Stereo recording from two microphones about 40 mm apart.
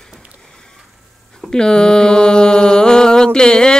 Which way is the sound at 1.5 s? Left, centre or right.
Centre.